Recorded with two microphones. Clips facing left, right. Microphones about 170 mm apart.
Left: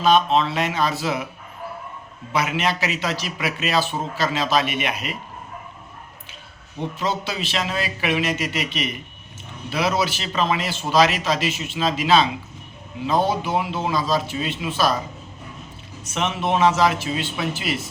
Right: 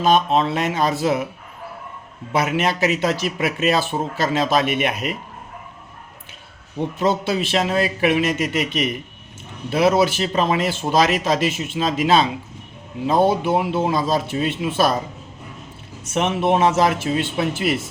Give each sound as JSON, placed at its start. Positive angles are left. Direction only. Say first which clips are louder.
{"t": 0.0, "sound": "speech", "louder": "right 1 dB", "side_deg": -45}
{"t": 2.3, "sound": "speech", "louder": "right 3 dB", "side_deg": -45}
{"t": 7.0, "sound": "speech", "louder": "right 7 dB", "side_deg": -50}
{"t": 16.1, "sound": "speech", "louder": "right 4 dB", "side_deg": -50}